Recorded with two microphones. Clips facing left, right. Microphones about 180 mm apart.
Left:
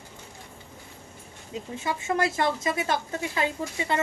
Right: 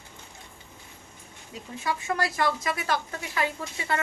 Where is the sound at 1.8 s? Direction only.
25° left (ahead or behind).